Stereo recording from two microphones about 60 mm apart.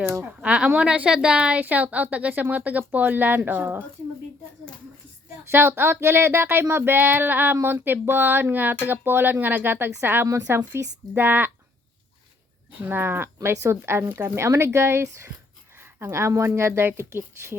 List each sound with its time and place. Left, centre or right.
0.4 s a woman's voice: right
5.5 s speech: right
12.9 s speech: right
16.1 s speech: right